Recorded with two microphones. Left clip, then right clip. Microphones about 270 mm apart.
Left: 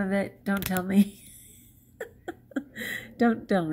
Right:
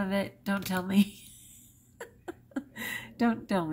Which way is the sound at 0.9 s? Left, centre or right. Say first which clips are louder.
Left 3 dB; centre.